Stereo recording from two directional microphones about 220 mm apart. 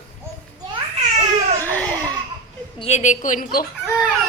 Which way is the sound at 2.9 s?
35° left (ahead or behind).